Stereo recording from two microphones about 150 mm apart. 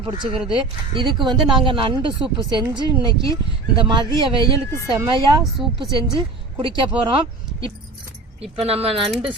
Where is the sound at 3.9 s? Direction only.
30° right (ahead or behind).